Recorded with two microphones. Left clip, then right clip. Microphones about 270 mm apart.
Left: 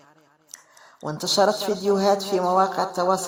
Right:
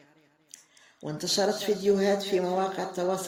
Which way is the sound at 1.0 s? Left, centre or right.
Left.